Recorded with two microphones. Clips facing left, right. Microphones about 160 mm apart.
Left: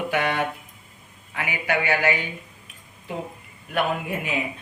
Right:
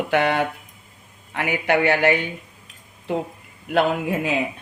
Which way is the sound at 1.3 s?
65° right (ahead or behind).